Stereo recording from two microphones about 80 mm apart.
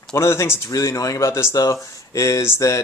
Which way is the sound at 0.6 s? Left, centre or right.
Left.